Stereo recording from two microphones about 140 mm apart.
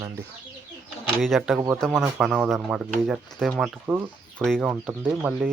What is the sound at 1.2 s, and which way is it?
Speech, centre (ahead or behind).